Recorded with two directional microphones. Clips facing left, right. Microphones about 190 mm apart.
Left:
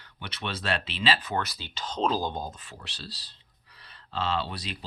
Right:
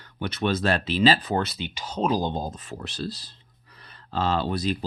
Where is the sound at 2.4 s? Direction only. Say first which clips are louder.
Right 6 dB; 40° right (ahead or behind).